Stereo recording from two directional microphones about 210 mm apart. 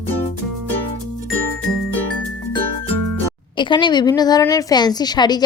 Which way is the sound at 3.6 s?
20° left (ahead or behind).